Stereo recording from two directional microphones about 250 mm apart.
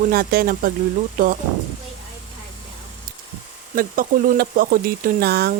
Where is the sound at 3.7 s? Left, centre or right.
Right.